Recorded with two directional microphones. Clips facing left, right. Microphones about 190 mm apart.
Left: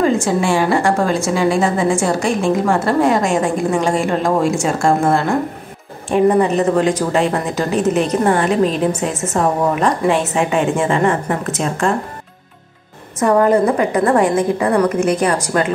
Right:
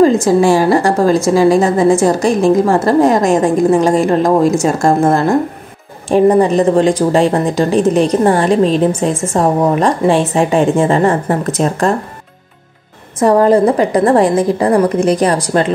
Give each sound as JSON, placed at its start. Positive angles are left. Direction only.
{"t": 0.0, "sound": "speech", "side_deg": -40}
{"t": 13.2, "sound": "speech", "side_deg": -30}